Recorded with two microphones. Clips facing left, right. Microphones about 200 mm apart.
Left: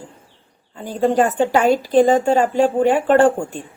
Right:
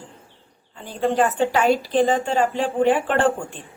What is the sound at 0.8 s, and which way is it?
A woman's voice, 45° left (ahead or behind).